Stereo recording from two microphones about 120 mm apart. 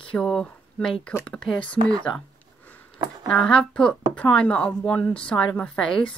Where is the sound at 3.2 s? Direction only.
5° left (ahead or behind).